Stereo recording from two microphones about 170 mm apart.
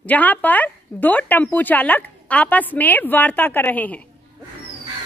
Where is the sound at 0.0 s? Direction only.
10° left (ahead or behind).